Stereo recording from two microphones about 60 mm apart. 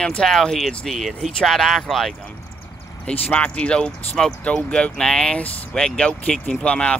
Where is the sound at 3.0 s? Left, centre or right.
Centre.